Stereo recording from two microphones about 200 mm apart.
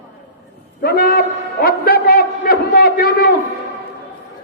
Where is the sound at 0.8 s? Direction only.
50° left (ahead or behind).